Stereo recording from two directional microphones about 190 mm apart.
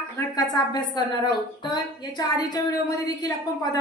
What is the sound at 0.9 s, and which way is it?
A woman's voice, 20° left (ahead or behind).